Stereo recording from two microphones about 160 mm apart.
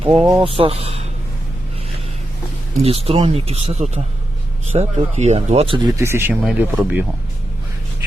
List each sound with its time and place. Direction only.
0.0 s speech: 35° right (ahead or behind)
2.8 s speech: 35° right (ahead or behind)
6.0 s speech: 15° right (ahead or behind)